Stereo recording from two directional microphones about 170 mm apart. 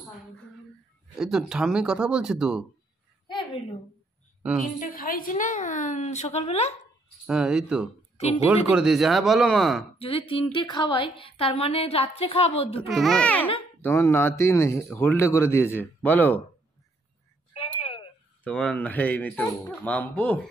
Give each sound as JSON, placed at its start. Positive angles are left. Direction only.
{"t": 1.1, "sound": "speech", "side_deg": -5}
{"t": 4.4, "sound": "a woman's voice", "side_deg": -5}
{"t": 4.7, "sound": "a woman's voice", "side_deg": 55}
{"t": 7.2, "sound": "speech", "side_deg": -5}
{"t": 8.2, "sound": "a woman's voice", "side_deg": 40}
{"t": 8.6, "sound": "speech", "side_deg": -5}
{"t": 9.9, "sound": "a woman's voice", "side_deg": 35}
{"t": 12.8, "sound": "a man's voice", "side_deg": 0}
{"t": 17.7, "sound": "a sound", "side_deg": 35}
{"t": 18.4, "sound": "a man's voice", "side_deg": 5}